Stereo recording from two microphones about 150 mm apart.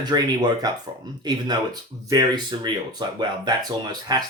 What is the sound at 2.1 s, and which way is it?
Speech, 25° right (ahead or behind).